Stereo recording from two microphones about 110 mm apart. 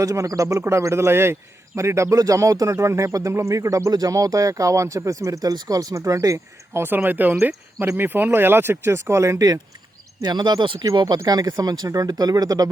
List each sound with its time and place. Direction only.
0.0 s a man's voice: 30° right (ahead or behind)